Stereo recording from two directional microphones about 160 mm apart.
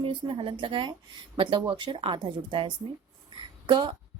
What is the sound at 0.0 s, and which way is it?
A woman's voice, 35° right (ahead or behind).